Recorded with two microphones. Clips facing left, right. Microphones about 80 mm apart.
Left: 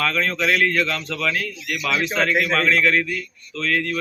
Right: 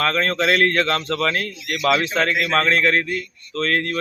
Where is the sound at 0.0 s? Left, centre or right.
Right.